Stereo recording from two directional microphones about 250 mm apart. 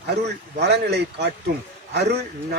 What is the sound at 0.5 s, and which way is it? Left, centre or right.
A man's voice, right.